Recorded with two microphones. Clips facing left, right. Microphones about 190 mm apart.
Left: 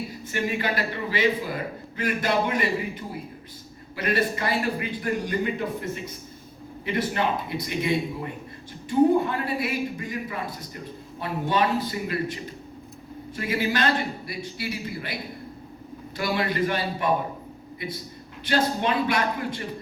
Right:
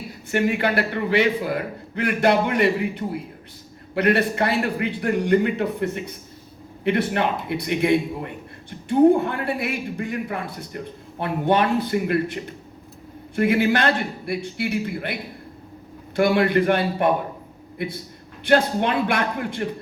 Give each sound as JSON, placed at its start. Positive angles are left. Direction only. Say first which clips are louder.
{"t": 0.3, "sound": "a man's voice", "louder": "right 6 dB", "side_deg": -60}
{"t": 18.4, "sound": "a man's voice", "louder": "right 5 dB", "side_deg": -55}